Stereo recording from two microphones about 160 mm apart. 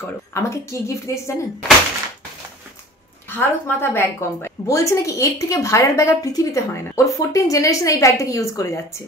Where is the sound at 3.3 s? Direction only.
15° left (ahead or behind).